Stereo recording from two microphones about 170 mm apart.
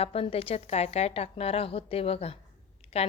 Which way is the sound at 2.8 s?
35° left (ahead or behind).